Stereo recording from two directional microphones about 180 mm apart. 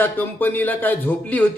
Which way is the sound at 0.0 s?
10° left (ahead or behind).